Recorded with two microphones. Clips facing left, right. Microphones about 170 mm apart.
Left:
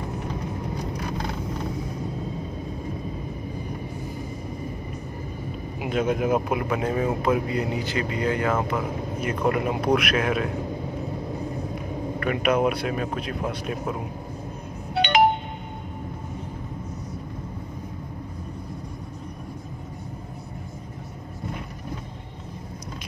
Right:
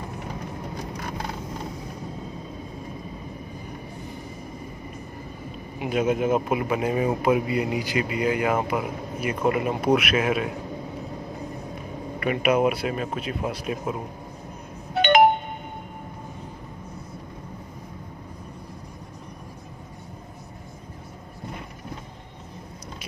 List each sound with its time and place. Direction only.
5.9 s speech: 5° right (ahead or behind)
12.2 s speech: 5° right (ahead or behind)
15.0 s music: 50° right (ahead or behind)